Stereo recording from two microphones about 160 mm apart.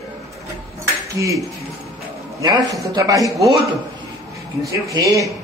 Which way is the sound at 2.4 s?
20° right (ahead or behind).